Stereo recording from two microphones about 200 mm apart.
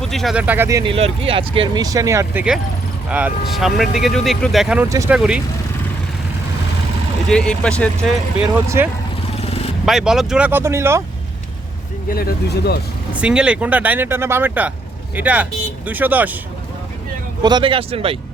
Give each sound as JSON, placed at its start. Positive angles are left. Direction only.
{"t": 0.0, "sound": "speech", "side_deg": 0}
{"t": 0.9, "sound": "speech", "side_deg": -30}
{"t": 4.9, "sound": "speech", "side_deg": -15}
{"t": 5.1, "sound": "speech", "side_deg": -5}
{"t": 7.3, "sound": "speech", "side_deg": 5}
{"t": 8.4, "sound": "speech", "side_deg": -10}
{"t": 9.4, "sound": "vehicle", "side_deg": 30}
{"t": 9.8, "sound": "speech", "side_deg": 0}
{"t": 12.0, "sound": "speech", "side_deg": 50}
{"t": 13.1, "sound": "speech", "side_deg": -5}
{"t": 17.4, "sound": "speech", "side_deg": -25}